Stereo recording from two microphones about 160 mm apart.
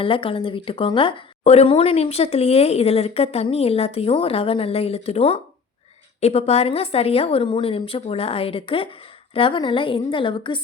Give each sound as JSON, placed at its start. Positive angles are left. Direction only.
{"t": 0.0, "sound": "speech", "side_deg": 35}